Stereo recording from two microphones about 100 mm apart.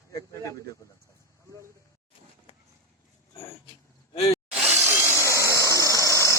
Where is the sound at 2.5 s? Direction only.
70° left (ahead or behind).